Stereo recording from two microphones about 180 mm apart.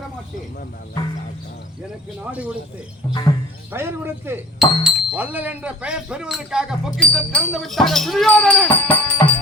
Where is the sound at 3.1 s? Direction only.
25° left (ahead or behind).